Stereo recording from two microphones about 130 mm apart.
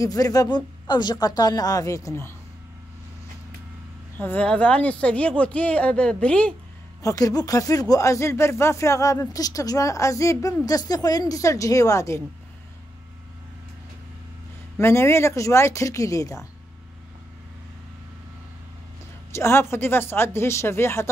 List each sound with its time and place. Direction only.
0.0 s speech: 30° left (ahead or behind)
4.2 s speech: 10° left (ahead or behind)
7.0 s speech: 25° left (ahead or behind)
14.8 s speech: 20° left (ahead or behind)
19.3 s speech: 20° left (ahead or behind)